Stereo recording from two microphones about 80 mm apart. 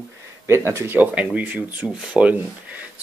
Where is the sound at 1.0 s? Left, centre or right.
Centre.